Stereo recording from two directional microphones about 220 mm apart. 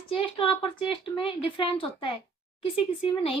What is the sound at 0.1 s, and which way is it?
Speech, 25° left (ahead or behind).